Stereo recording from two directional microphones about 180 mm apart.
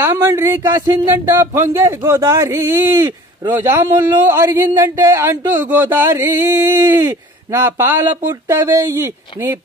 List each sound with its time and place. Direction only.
0.0 s speech: 15° right (ahead or behind)